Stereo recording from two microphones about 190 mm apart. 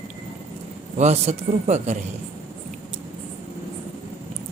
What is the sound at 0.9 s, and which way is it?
Speech, 35° right (ahead or behind).